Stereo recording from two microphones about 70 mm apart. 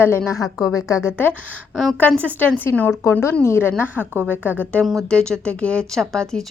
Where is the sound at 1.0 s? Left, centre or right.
Left.